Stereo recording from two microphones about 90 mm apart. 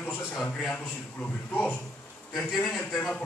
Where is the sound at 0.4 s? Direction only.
5° left (ahead or behind).